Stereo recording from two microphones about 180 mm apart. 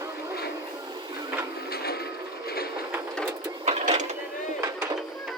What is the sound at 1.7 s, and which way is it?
Mechanisms, 60° left (ahead or behind).